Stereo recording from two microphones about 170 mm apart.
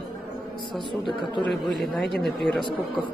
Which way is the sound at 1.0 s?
30° left (ahead or behind).